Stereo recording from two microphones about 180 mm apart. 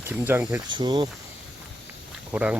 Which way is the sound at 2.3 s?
5° right (ahead or behind).